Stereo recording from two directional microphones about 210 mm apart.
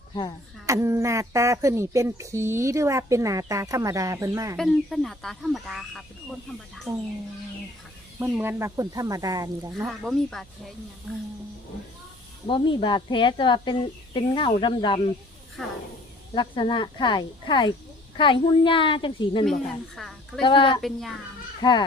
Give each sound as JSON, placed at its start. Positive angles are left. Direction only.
{"t": 0.1, "sound": "speech", "side_deg": 20}
{"t": 0.7, "sound": "speech", "side_deg": -15}
{"t": 4.5, "sound": "speech", "side_deg": 0}
{"t": 6.9, "sound": "speech", "side_deg": -30}
{"t": 8.2, "sound": "speech", "side_deg": -10}
{"t": 9.8, "sound": "speech", "side_deg": 0}
{"t": 12.5, "sound": "a woman's voice", "side_deg": 25}
{"t": 15.6, "sound": "speech", "side_deg": 0}
{"t": 16.3, "sound": "a woman's voice", "side_deg": 20}
{"t": 20.0, "sound": "a woman's voice", "side_deg": 0}
{"t": 20.4, "sound": "a woman's voice", "side_deg": 25}
{"t": 20.8, "sound": "speech", "side_deg": 0}
{"t": 21.6, "sound": "a woman's voice", "side_deg": 20}